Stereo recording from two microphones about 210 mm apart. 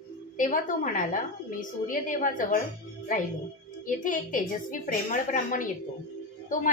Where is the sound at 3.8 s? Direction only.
40° left (ahead or behind).